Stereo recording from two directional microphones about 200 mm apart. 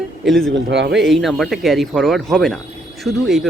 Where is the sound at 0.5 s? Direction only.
60° right (ahead or behind).